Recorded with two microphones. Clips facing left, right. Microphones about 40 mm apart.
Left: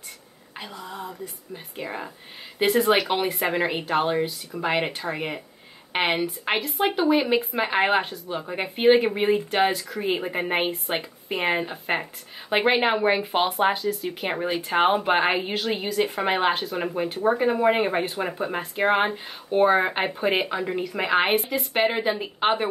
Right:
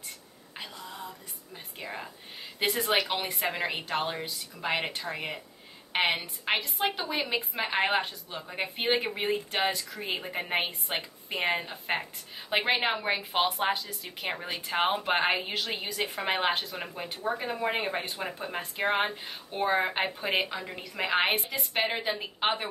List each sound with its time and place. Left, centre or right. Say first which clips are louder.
0.6 s a woman's voice: left 5 dB; centre
21.0 s a woman's voice: left 5 dB; centre